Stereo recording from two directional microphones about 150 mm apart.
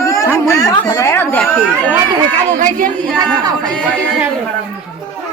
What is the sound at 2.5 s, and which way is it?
Speech, 65° right (ahead or behind).